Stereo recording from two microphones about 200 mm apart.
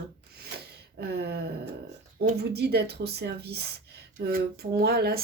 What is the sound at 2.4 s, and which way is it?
Speech, 55° right (ahead or behind).